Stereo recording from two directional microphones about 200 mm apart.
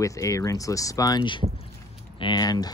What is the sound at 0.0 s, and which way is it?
Speech, 15° left (ahead or behind).